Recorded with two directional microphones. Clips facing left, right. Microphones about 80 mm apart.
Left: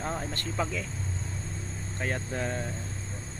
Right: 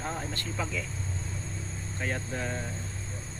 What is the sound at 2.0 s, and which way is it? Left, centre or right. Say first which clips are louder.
Speech: left 2 dB; left.